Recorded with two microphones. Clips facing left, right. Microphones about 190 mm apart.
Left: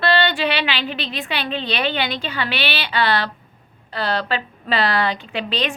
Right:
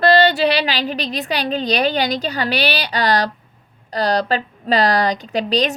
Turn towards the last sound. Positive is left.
turn(degrees=-40)  # may be behind; listen again after turning